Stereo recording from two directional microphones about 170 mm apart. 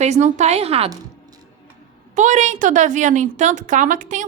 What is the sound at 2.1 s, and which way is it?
A woman's voice, 45° right (ahead or behind).